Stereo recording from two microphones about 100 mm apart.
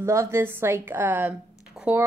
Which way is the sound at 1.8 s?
5° right (ahead or behind).